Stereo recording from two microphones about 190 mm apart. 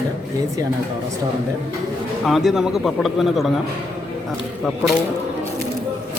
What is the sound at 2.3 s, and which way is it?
A man's voice, centre (ahead or behind).